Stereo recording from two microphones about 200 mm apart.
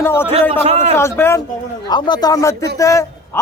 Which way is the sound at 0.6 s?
35° right (ahead or behind).